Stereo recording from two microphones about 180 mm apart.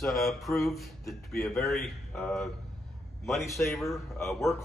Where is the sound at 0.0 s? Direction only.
Centre (ahead or behind).